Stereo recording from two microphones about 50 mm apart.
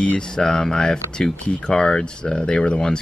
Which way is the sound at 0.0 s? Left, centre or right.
Centre.